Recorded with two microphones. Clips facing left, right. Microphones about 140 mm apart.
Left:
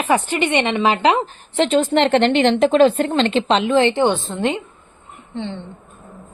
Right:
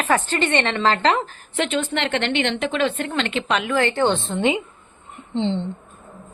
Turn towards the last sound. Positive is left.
turn(degrees=-20)  # may be behind; listen again after turning